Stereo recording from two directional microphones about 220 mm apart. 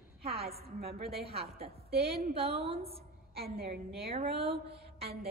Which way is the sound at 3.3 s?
45° right (ahead or behind).